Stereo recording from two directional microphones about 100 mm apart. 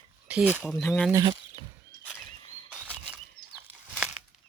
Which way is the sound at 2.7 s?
15° right (ahead or behind).